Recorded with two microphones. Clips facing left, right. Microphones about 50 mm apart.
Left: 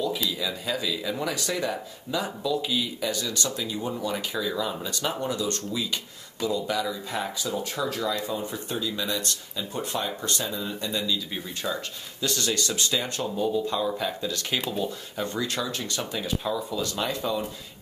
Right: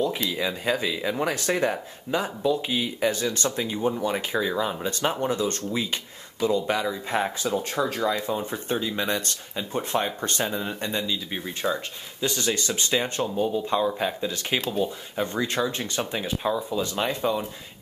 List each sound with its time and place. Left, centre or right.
0.3 s speech: right; by 15.2 s centre
15.2 s speech: right